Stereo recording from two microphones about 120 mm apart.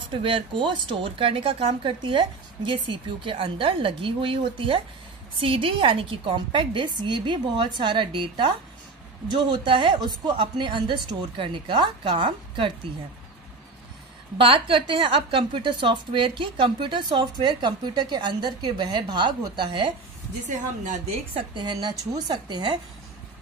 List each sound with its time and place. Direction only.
0.0 s a woman's voice: 45° right (ahead or behind)
14.4 s a woman's voice: 45° right (ahead or behind)
21.4 s a woman's voice: 40° right (ahead or behind)